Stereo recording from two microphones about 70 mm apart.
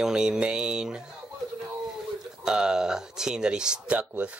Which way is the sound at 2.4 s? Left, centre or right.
Centre.